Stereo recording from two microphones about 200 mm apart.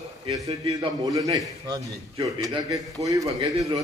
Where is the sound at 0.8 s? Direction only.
20° right (ahead or behind).